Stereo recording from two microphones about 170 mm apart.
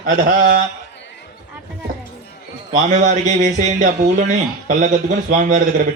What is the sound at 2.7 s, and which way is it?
A man's voice, 45° right (ahead or behind).